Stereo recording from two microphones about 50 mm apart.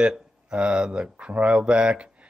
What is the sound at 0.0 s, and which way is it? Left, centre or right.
Speech, centre.